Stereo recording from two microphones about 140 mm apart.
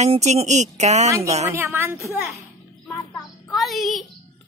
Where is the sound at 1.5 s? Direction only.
15° right (ahead or behind).